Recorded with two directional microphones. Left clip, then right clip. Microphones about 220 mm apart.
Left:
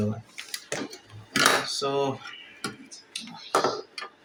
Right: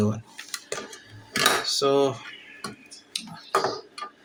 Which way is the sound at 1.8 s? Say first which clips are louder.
Right 5 dB; 50° right (ahead or behind).